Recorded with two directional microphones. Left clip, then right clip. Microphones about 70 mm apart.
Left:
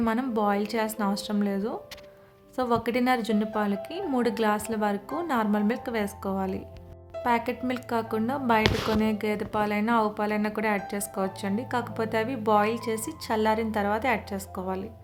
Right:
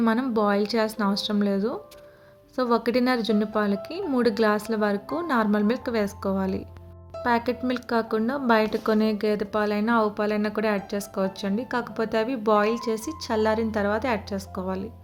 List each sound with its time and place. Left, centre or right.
0.0 s a woman's voice: right